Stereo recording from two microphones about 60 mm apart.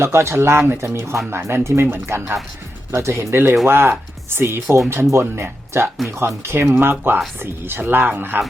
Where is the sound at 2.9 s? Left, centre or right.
Right.